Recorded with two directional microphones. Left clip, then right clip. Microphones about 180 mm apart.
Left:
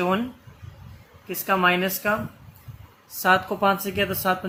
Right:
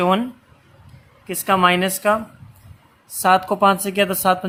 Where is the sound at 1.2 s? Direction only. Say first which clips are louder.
Right 5 dB; 45° right (ahead or behind).